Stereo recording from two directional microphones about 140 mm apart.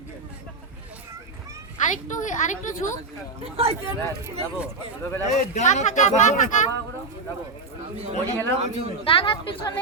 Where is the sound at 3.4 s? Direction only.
45° right (ahead or behind).